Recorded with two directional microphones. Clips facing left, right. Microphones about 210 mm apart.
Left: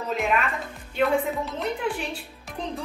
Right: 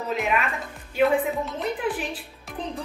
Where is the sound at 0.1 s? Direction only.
5° right (ahead or behind).